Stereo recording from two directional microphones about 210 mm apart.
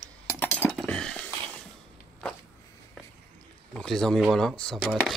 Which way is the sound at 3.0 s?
Centre (ahead or behind).